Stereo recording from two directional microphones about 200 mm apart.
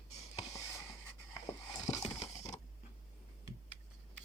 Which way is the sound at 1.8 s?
35° left (ahead or behind).